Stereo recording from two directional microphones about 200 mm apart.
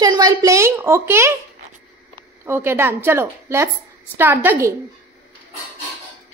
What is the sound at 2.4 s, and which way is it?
A woman's voice, 10° right (ahead or behind).